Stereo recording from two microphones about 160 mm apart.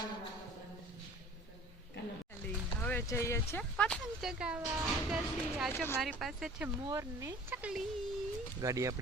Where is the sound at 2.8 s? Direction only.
10° left (ahead or behind).